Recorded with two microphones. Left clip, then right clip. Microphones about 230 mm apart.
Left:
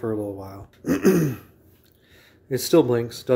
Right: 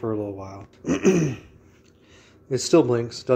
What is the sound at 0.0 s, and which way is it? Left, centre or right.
Throat clearing, centre.